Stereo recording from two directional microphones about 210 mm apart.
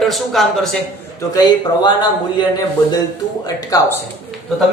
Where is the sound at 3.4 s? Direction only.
15° left (ahead or behind).